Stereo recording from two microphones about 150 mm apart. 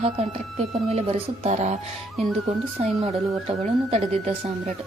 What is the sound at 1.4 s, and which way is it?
Speech, 50° right (ahead or behind).